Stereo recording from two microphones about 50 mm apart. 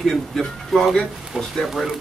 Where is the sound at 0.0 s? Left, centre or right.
Centre.